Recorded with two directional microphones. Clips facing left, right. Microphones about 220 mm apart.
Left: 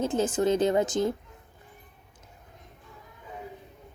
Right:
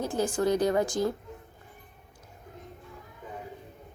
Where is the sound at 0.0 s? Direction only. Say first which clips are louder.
Left 2 dB; 20° left (ahead or behind).